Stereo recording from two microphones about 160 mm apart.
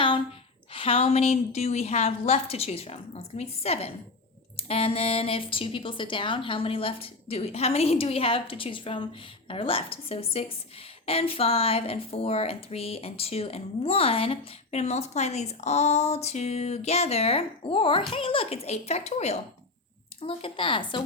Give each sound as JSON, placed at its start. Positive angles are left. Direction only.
{"t": 0.7, "sound": "a woman's voice", "side_deg": 35}